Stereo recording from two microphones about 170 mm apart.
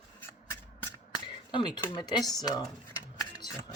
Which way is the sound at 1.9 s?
25° left (ahead or behind).